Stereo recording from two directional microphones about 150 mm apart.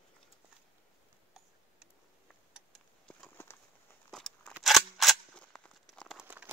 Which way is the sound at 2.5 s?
Centre (ahead or behind).